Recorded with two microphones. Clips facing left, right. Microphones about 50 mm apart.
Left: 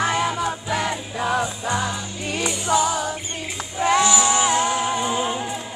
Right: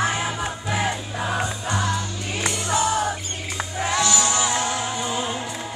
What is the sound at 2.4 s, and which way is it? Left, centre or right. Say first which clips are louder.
Music: left 2 dB; right.